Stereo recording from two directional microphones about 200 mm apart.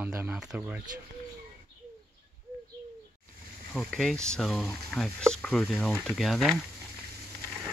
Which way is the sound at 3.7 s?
Centre (ahead or behind).